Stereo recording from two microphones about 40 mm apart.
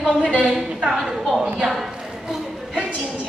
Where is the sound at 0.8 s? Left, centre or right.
Centre.